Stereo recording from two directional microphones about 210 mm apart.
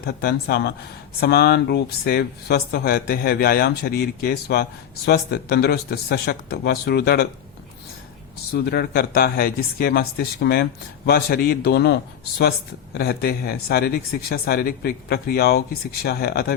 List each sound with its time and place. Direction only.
0.0 s speech: 45° left (ahead or behind)
8.5 s speech: 50° left (ahead or behind)